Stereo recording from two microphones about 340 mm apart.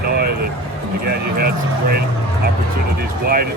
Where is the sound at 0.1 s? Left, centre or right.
Right.